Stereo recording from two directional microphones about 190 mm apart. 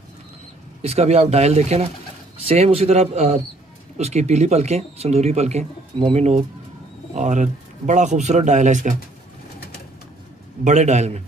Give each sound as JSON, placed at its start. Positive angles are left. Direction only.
{"t": 0.8, "sound": "speech", "side_deg": -35}
{"t": 10.6, "sound": "speech", "side_deg": -35}